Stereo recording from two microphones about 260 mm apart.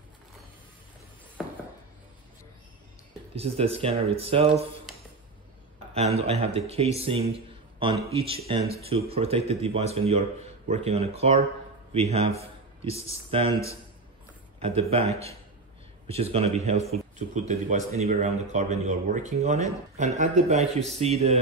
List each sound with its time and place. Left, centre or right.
1.4 s dishes: centre
3.3 s speech: right
4.9 s a sound: centre
5.9 s speech: right
14.6 s speech: right
16.1 s speech: right